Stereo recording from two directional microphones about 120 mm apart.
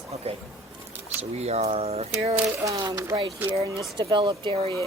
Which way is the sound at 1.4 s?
65° right (ahead or behind).